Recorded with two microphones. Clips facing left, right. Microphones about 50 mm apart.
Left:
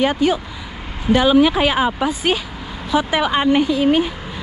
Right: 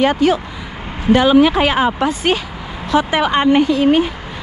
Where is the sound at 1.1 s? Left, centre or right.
Right.